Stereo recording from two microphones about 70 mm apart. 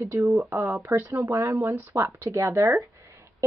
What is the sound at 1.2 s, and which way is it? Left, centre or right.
Speech, right.